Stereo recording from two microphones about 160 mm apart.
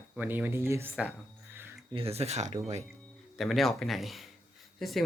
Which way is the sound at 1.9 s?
40° right (ahead or behind).